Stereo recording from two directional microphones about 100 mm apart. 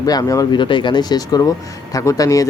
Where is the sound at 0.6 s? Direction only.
55° left (ahead or behind); by 2.5 s 35° left (ahead or behind).